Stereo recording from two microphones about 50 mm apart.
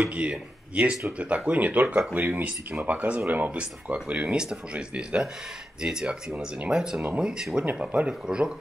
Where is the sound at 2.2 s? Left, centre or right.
Right.